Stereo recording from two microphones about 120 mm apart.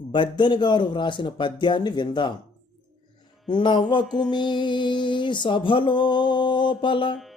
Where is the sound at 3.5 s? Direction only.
40° left (ahead or behind).